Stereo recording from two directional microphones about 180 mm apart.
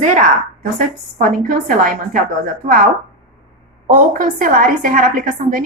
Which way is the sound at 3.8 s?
45° right (ahead or behind).